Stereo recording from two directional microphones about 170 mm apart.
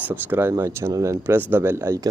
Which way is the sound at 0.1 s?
10° right (ahead or behind).